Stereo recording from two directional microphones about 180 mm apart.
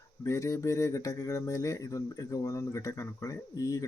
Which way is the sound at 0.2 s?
15° left (ahead or behind).